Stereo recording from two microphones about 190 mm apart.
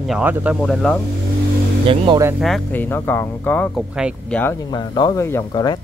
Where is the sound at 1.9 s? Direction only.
25° right (ahead or behind).